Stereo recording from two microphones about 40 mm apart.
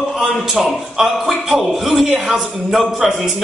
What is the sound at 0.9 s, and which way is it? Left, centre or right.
A man's voice, centre.